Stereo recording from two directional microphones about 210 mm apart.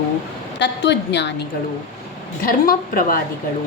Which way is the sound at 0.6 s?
55° left (ahead or behind).